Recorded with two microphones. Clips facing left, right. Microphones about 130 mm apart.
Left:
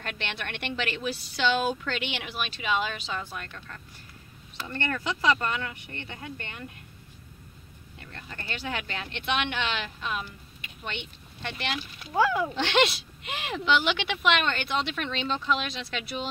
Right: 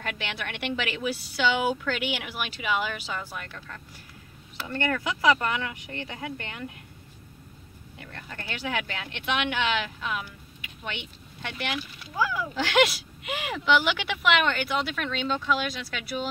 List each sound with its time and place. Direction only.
0.0 s speech: 10° right (ahead or behind)
8.6 s speech: 10° right (ahead or behind)
12.1 s speech: 30° left (ahead or behind)
12.5 s speech: 5° right (ahead or behind)